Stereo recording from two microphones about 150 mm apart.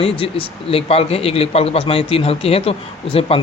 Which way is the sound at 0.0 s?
40° left (ahead or behind).